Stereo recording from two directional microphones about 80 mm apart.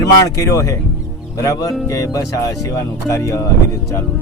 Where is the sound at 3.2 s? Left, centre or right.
Left.